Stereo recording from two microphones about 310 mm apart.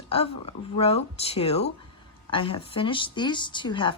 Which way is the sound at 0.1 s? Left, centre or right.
Centre.